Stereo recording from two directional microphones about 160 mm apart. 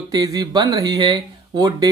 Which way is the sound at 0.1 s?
25° right (ahead or behind).